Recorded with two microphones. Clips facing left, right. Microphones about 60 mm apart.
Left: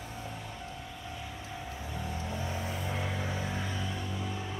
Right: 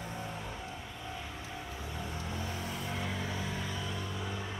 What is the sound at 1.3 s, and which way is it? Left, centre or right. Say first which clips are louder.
Vehicle: left 1 dB; centre.